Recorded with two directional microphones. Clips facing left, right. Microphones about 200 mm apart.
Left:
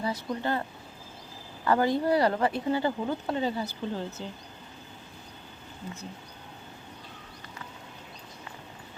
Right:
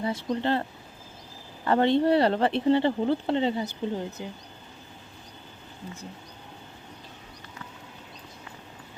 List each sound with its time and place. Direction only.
0.0 s speech: 25° right (ahead or behind)
1.6 s speech: 25° right (ahead or behind)